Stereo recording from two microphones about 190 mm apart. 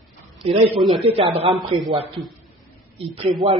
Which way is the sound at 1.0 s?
30° right (ahead or behind).